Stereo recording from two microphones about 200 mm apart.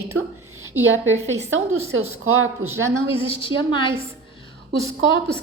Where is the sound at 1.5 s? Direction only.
90° right.